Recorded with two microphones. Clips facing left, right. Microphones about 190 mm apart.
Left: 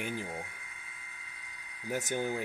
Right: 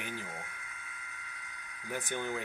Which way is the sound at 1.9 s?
40° left (ahead or behind).